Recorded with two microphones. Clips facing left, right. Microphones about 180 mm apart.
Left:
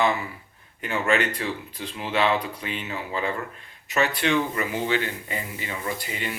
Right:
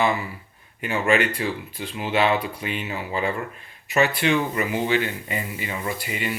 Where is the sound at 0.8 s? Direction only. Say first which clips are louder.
Right 2 dB; 10° right (ahead or behind).